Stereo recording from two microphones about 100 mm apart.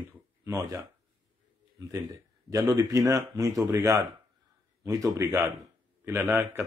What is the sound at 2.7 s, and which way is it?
Speech, 35° right (ahead or behind).